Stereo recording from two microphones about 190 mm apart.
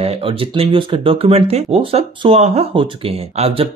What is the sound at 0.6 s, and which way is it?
Speech, 30° right (ahead or behind).